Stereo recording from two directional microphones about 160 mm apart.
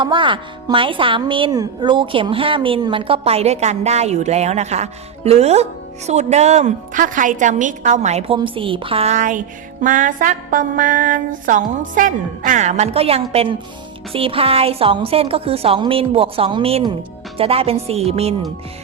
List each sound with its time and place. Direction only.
0.0 s speech: 30° right (ahead or behind)
6.1 s music: 45° right (ahead or behind)
8.4 s speech: 35° right (ahead or behind); by 9.4 s 50° right (ahead or behind)
9.8 s music: 55° right (ahead or behind)
14.1 s speech: 35° right (ahead or behind)